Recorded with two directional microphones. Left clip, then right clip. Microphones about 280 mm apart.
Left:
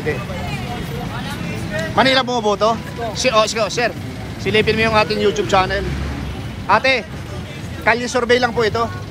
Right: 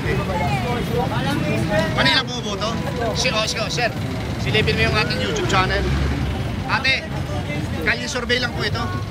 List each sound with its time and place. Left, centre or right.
2.0 s speech: centre